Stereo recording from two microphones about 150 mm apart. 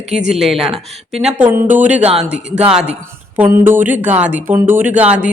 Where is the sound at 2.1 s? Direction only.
5° right (ahead or behind).